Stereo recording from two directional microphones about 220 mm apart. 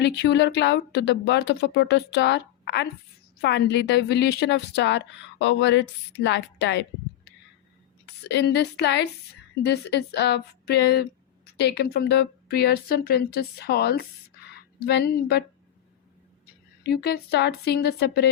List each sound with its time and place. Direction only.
0.0 s a woman's voice: 50° left (ahead or behind)
8.3 s a woman's voice: 50° left (ahead or behind)
16.8 s a woman's voice: 45° left (ahead or behind)